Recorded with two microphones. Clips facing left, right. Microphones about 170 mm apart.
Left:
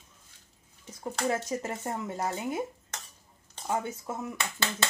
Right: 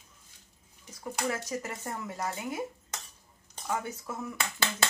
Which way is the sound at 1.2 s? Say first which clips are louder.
Left 4 dB; 25° left (ahead or behind).